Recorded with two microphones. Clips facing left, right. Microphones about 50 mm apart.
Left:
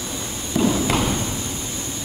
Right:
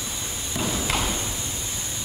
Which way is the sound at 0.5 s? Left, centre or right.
Centre.